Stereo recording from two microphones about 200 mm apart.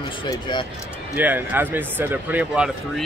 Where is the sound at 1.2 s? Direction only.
10° right (ahead or behind).